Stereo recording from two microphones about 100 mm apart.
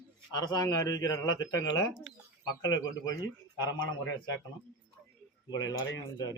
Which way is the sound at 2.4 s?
40° left (ahead or behind).